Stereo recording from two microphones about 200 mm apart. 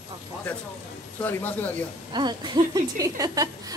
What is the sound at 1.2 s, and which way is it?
Speech, 10° left (ahead or behind).